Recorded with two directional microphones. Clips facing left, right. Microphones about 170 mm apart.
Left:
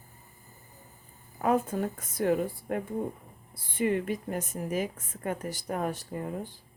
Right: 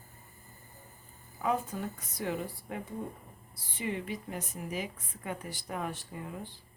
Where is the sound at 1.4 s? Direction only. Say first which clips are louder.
Left 6 dB; 50° left (ahead or behind).